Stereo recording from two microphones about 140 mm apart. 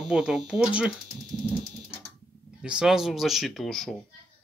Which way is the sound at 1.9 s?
15° left (ahead or behind).